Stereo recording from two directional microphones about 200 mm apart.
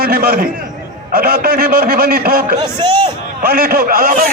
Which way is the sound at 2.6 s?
20° right (ahead or behind).